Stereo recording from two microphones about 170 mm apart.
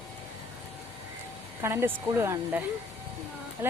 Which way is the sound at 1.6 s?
15° right (ahead or behind).